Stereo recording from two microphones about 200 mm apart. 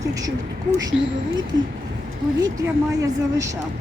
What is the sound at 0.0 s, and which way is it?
Speech, 15° right (ahead or behind).